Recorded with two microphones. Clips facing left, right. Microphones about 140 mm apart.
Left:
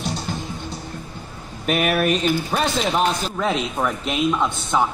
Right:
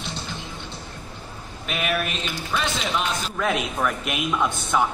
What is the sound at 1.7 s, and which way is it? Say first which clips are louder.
A man's voice: left 7 dB; 45° left (ahead or behind).